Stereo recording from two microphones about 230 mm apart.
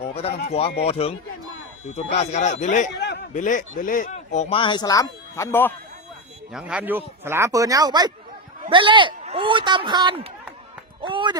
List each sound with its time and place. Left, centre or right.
0.0 s a sound: left
0.9 s speech: left; by 5.7 s centre
6.5 s a man's voice: centre; by 11.3 s right